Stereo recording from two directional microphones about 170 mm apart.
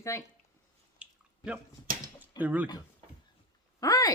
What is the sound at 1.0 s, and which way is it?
Drip, 5° right (ahead or behind).